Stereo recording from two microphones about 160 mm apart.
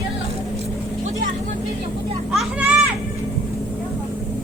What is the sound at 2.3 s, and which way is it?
Children playing, 5° right (ahead or behind).